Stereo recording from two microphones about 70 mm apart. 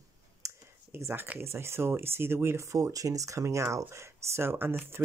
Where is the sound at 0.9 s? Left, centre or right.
Right.